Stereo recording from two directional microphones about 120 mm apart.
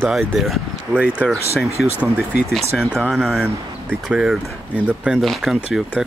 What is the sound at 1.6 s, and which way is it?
Speech, 25° left (ahead or behind).